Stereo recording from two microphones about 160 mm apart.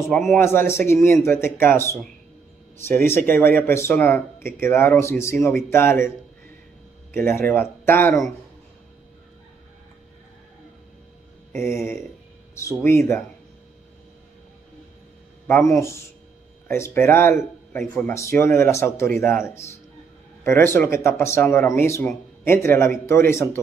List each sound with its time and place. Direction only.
0.1 s speech: centre (ahead or behind)
0.4 s speech: 15° left (ahead or behind)
7.2 s speech: 15° left (ahead or behind)
11.7 s speech: 15° left (ahead or behind)
15.4 s speech: 15° left (ahead or behind)